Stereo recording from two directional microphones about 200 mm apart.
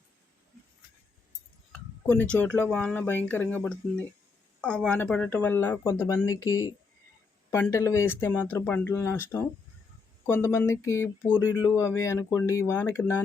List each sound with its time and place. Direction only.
1.7 s speech: 5° left (ahead or behind)